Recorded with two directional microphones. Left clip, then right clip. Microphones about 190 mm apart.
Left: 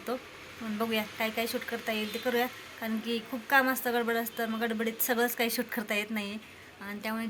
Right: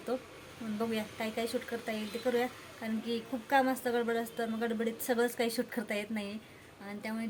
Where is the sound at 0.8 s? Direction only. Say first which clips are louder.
Left 5 dB; 10° right (ahead or behind).